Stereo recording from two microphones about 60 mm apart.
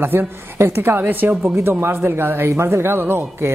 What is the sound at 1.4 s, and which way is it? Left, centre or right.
Speech, right.